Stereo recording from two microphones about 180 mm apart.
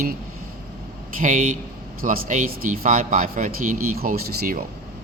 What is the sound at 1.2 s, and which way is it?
A man's voice, 45° right (ahead or behind).